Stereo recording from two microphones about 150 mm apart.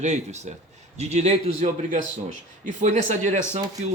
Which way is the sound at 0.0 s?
50° right (ahead or behind).